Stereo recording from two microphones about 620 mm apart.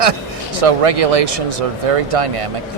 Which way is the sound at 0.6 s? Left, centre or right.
Right.